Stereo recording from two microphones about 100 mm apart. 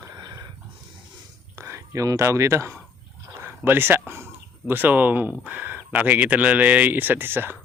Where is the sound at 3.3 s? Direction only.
20° right (ahead or behind).